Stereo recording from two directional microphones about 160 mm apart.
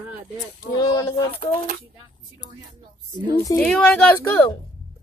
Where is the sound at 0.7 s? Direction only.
20° left (ahead or behind).